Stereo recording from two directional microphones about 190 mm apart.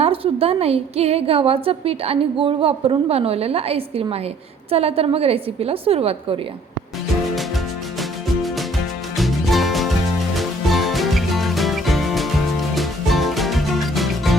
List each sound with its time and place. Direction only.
0.0 s a woman's voice: 30° right (ahead or behind)
9.1 s music: centre (ahead or behind)